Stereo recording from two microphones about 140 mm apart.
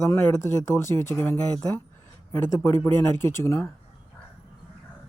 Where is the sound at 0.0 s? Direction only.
20° left (ahead or behind).